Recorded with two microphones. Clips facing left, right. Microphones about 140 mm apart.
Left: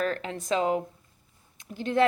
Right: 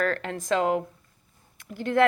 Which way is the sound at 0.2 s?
65° right (ahead or behind).